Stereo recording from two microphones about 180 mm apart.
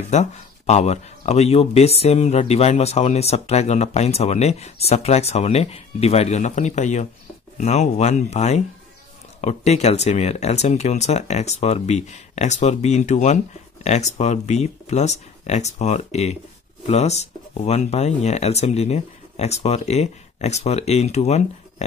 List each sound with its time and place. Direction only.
0.1 s speech: 40° left (ahead or behind)